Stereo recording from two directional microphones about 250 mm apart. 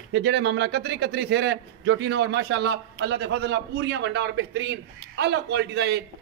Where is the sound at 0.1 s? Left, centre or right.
Right.